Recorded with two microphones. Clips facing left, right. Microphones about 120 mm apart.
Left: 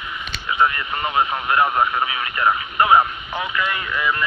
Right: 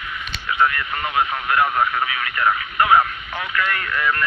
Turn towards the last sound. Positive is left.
turn(degrees=15)  # may be behind; listen again after turning